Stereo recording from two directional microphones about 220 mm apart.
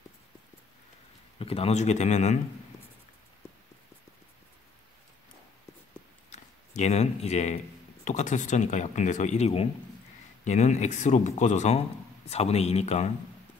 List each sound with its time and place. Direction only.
1.4 s speech: 25° left (ahead or behind)
6.3 s speech: 30° left (ahead or behind)